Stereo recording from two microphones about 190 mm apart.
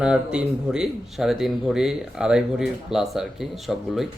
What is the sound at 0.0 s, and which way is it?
Speech, 5° right (ahead or behind).